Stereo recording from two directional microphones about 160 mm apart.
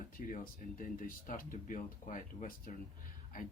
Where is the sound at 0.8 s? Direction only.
60° left (ahead or behind).